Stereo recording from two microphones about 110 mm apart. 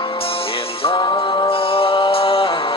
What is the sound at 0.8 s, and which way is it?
Music, 50° left (ahead or behind).